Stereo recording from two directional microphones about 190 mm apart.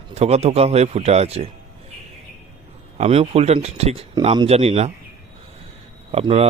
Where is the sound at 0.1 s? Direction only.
35° right (ahead or behind).